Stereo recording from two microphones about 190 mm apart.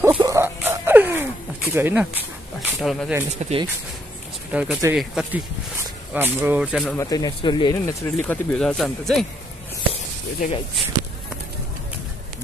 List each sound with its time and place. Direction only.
0.1 s a sound: 20° right (ahead or behind); by 3.2 s centre (ahead or behind)
3.3 s speech: 35° right (ahead or behind)
4.5 s speech: 5° right (ahead or behind)
7.0 s speech: 20° left (ahead or behind)
8.2 s speech: 5° left (ahead or behind)
10.4 s speech: 45° left (ahead or behind)